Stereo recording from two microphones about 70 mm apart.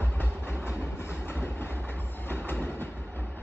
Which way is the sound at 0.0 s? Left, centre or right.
Left.